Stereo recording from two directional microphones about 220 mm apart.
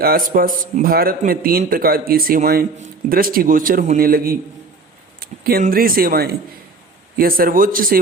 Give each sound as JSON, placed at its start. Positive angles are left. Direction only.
{"t": 0.0, "sound": "speech", "side_deg": -40}